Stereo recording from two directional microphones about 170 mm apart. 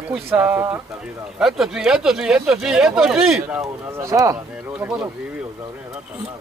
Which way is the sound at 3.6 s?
20° right (ahead or behind).